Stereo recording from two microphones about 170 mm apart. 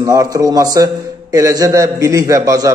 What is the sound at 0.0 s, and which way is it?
A man's voice, 20° right (ahead or behind).